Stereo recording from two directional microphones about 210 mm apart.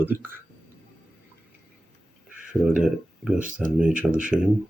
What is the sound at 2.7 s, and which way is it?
Speech, centre (ahead or behind).